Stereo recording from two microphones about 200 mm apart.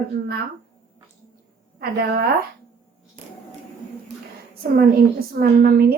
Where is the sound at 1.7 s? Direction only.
55° right (ahead or behind).